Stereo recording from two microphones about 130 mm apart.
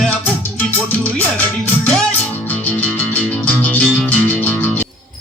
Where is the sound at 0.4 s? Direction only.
15° left (ahead or behind).